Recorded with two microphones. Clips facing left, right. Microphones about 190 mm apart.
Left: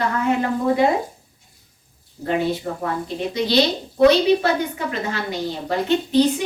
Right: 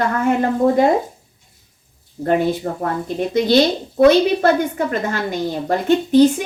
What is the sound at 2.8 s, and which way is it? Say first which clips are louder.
A woman's voice: right 3 dB; 50° right (ahead or behind).